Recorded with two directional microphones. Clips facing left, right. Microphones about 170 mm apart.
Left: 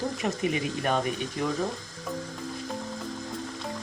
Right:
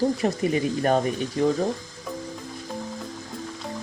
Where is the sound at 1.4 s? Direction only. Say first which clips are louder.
Right 9 dB; 30° right (ahead or behind).